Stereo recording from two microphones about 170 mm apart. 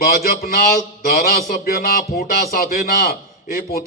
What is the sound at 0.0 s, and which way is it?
A man's voice, 60° left (ahead or behind).